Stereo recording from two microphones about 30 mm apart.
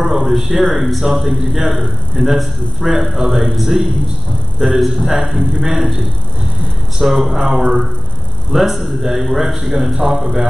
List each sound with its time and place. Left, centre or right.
0.0 s a man's voice: centre